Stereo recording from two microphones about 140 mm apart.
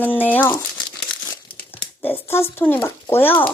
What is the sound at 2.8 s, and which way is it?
Speech, 20° left (ahead or behind).